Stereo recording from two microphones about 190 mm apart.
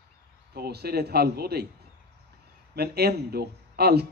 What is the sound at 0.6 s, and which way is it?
Speech, 55° right (ahead or behind).